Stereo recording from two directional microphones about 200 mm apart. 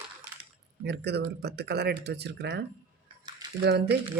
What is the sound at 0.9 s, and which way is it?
Speech, 55° right (ahead or behind).